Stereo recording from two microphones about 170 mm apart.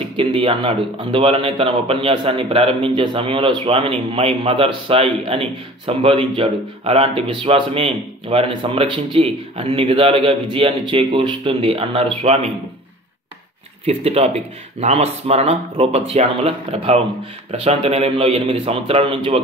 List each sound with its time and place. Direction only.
0.0 s speech: 30° right (ahead or behind)
13.8 s speech: 35° right (ahead or behind)